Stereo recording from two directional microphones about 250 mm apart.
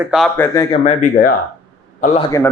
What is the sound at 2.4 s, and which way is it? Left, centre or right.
Speech, centre.